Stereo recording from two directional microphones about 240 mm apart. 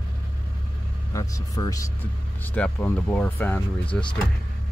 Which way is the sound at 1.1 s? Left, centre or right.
Centre.